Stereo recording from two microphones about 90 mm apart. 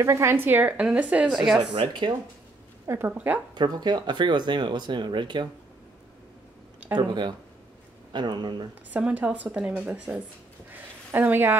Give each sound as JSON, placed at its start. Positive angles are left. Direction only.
{"t": 0.0, "sound": "a woman's voice", "side_deg": -30}
{"t": 1.7, "sound": "speech", "side_deg": -65}
{"t": 3.1, "sound": "speech", "side_deg": -15}
{"t": 3.5, "sound": "speech", "side_deg": -50}
{"t": 7.0, "sound": "speech", "side_deg": -55}
{"t": 8.9, "sound": "speech", "side_deg": -15}
{"t": 10.7, "sound": "a sound", "side_deg": -20}